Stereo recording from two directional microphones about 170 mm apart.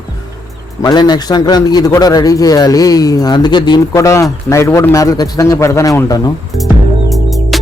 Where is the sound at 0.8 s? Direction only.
25° left (ahead or behind).